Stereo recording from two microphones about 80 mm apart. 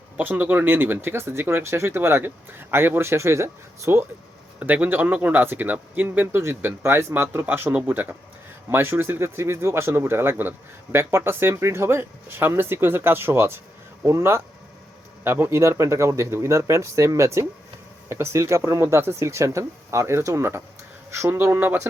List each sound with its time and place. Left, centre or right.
0.2 s speech: right
4.6 s a man's voice: right